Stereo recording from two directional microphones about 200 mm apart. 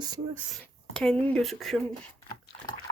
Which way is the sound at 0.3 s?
5° right (ahead or behind).